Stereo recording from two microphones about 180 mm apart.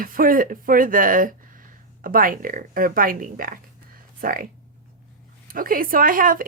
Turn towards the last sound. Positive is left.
turn(degrees=-50)  # may be behind; listen again after turning